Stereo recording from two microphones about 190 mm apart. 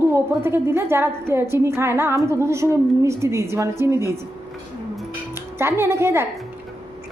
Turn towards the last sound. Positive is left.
turn(degrees=-15)  # may be behind; listen again after turning